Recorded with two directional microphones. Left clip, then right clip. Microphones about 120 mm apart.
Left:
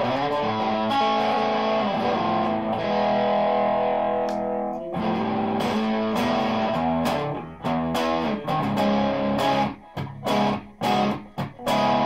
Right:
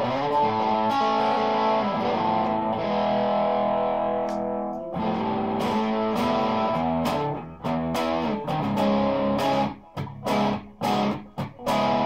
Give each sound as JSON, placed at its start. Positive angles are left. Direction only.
{"t": 0.0, "sound": "music", "side_deg": -15}
{"t": 5.9, "sound": "music", "side_deg": -15}
{"t": 7.9, "sound": "music", "side_deg": -15}